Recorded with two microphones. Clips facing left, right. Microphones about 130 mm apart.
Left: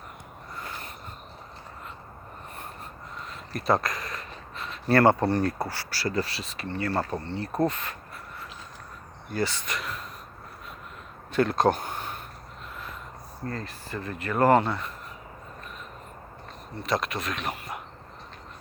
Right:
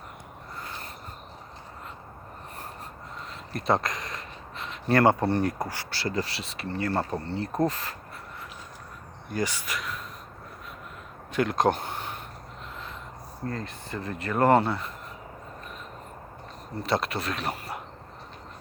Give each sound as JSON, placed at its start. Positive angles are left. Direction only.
{"t": 3.2, "sound": "a sound", "side_deg": -25}
{"t": 5.3, "sound": "speech", "side_deg": -15}
{"t": 9.3, "sound": "speech", "side_deg": -15}
{"t": 11.3, "sound": "a sound", "side_deg": -15}
{"t": 13.4, "sound": "speech", "side_deg": -15}
{"t": 16.7, "sound": "speech", "side_deg": -30}